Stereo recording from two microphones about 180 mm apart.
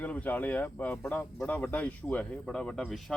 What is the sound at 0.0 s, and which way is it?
Speech, 10° left (ahead or behind).